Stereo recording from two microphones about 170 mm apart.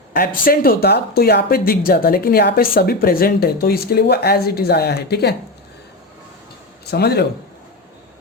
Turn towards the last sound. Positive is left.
turn(degrees=75)  # may be behind; listen again after turning